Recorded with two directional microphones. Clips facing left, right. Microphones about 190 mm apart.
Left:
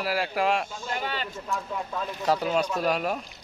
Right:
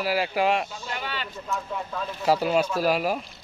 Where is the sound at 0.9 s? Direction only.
45° left (ahead or behind).